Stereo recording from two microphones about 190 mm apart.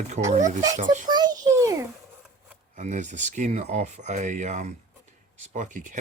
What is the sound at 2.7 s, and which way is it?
Speech, 40° right (ahead or behind).